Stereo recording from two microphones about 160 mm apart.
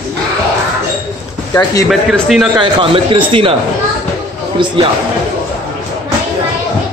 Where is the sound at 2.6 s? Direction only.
30° right (ahead or behind).